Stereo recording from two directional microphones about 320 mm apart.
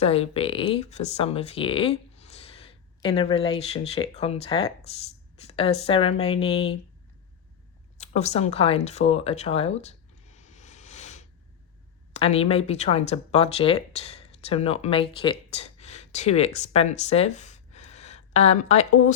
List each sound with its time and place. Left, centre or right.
0.0 s speech: centre
7.9 s speech: left
10.2 s a sound: left
12.1 s speech: centre